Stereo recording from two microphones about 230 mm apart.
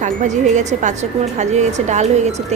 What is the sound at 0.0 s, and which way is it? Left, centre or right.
A woman's voice, right.